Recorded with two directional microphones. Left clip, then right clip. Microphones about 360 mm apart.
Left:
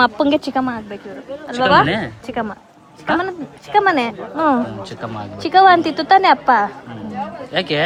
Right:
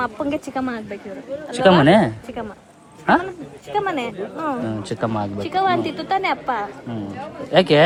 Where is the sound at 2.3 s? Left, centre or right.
Left.